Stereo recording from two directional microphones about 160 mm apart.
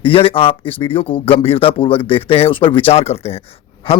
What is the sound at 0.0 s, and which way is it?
Speech, 35° left (ahead or behind).